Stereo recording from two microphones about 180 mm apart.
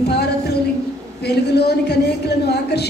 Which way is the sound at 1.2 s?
65° left (ahead or behind).